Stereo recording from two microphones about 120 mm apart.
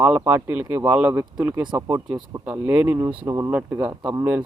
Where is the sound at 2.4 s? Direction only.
10° right (ahead or behind).